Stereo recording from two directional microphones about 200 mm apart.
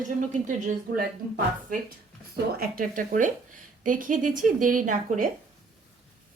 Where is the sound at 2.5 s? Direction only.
45° right (ahead or behind).